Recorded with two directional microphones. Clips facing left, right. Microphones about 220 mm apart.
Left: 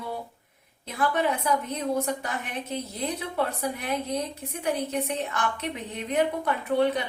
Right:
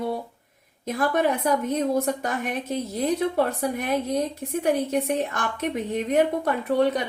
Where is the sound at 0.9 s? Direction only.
45° right (ahead or behind).